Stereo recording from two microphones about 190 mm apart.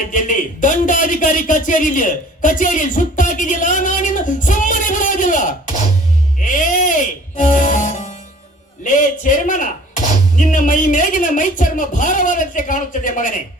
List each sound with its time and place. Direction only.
0.1 s speech: 45° left (ahead or behind)
6.4 s music: 45° left (ahead or behind)
8.8 s speech: 40° left (ahead or behind)